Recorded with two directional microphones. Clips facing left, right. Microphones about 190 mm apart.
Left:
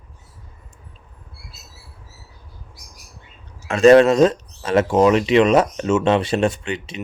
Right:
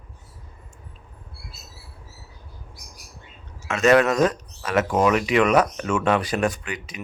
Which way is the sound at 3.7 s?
30° left (ahead or behind).